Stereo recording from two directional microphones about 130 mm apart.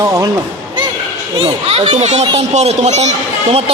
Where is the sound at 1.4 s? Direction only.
45° right (ahead or behind).